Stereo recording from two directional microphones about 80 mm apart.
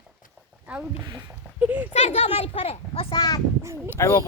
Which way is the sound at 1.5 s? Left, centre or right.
Centre.